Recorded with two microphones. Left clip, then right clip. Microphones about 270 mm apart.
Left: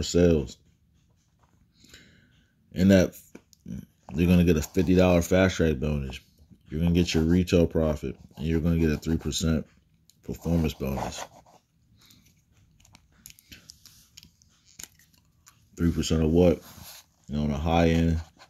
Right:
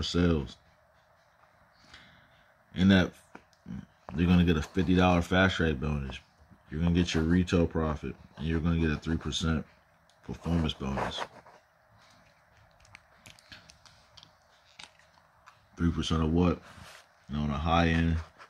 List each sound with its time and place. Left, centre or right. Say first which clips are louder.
0.0 s speech: left 7 dB; centre
2.7 s a sound: left 5 dB; centre
4.1 s speech: left 4 dB; centre
13.7 s tick-tock: left 6 dB; right
15.4 s tick-tock: left 4 dB; centre
17.3 s speech: left 2 dB; centre